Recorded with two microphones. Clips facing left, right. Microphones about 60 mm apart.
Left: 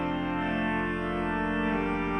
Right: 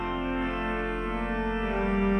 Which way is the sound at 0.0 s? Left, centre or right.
Right.